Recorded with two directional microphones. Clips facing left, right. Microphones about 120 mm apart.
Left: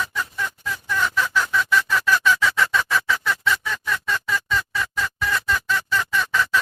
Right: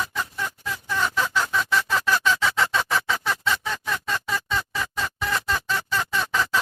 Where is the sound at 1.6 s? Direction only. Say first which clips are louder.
Left 2 dB; 30° right (ahead or behind).